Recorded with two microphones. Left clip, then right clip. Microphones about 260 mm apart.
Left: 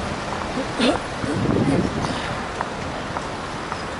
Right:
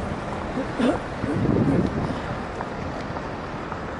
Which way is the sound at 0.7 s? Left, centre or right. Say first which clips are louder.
Left 3 dB; centre.